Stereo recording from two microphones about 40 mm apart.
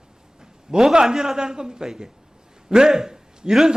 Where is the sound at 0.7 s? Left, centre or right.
Centre.